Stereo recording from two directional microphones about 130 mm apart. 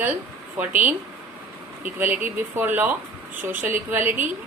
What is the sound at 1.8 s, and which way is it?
A woman's voice, 15° right (ahead or behind).